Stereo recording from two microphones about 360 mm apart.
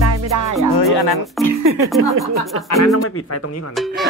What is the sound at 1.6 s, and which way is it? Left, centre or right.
Speech, right.